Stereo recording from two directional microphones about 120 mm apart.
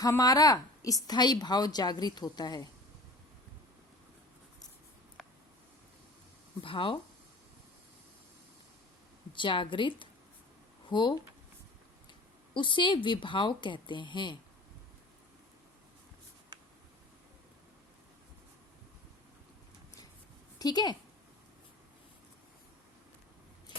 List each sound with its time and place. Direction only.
0.0 s a woman's voice: 30° left (ahead or behind)
6.6 s a woman's voice: 45° left (ahead or behind)
9.3 s a woman's voice: 45° left (ahead or behind)
12.5 s a woman's voice: 40° left (ahead or behind)
20.6 s a woman's voice: 35° left (ahead or behind)